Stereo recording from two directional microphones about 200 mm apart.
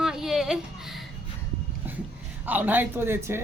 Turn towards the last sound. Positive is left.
turn(degrees=-10)  # may be behind; listen again after turning